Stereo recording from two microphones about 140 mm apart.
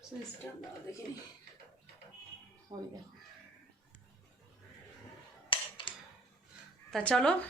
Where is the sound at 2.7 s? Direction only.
20° right (ahead or behind).